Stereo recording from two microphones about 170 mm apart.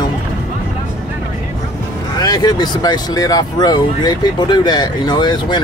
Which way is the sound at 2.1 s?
25° left (ahead or behind).